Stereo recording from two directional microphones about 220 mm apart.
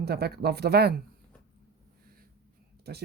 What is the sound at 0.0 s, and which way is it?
Speech, 45° right (ahead or behind).